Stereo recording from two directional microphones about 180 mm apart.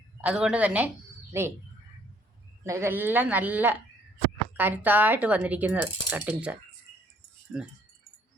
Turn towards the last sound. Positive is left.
turn(degrees=-10)  # may be behind; listen again after turning